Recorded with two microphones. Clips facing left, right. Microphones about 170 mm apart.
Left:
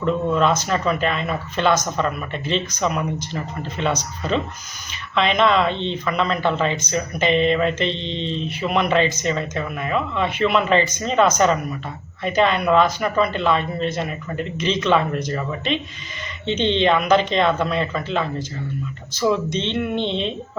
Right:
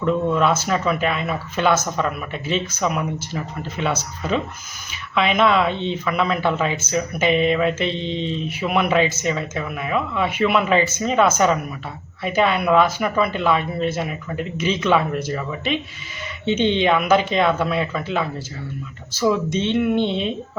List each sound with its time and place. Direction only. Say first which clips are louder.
0.0 s speech: even; 5° right (ahead or behind)
19.5 s speech: right 4 dB; 5° right (ahead or behind)